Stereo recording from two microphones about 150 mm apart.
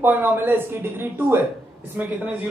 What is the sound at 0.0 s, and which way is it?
Speech, 15° right (ahead or behind).